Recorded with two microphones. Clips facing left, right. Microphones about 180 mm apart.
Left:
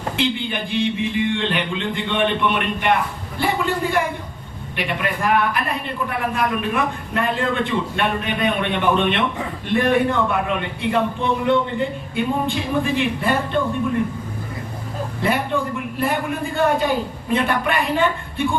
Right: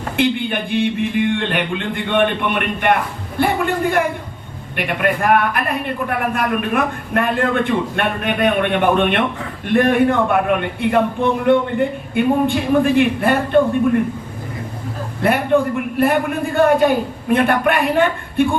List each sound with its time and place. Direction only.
0.2 s a man's voice: 55° right (ahead or behind)
16.0 s a man's voice: 55° right (ahead or behind)